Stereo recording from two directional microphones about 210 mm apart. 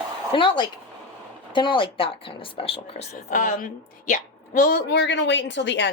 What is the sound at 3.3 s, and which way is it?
A woman's voice, 40° left (ahead or behind).